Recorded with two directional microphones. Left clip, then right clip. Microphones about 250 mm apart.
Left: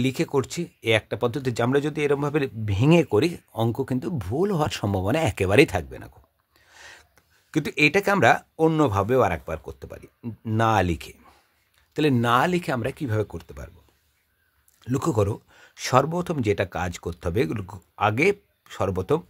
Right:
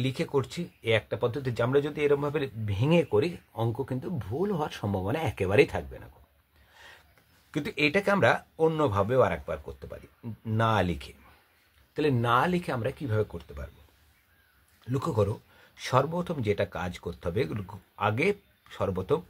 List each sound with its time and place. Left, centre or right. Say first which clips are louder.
0.0 s speech: left 5 dB; left
6.7 s gasp: left 5 dB; left
7.5 s speech: left 6 dB; left
14.8 s speech: left 4 dB; left